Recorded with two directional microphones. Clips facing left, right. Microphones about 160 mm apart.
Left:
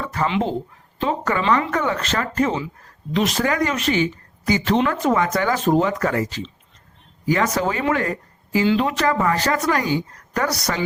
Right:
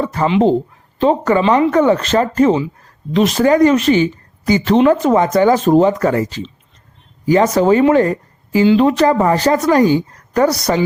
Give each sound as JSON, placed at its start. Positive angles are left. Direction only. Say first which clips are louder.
{"t": 0.0, "sound": "speech", "louder": "right 8 dB", "side_deg": -30}